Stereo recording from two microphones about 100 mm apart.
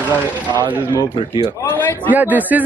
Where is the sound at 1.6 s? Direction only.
20° left (ahead or behind).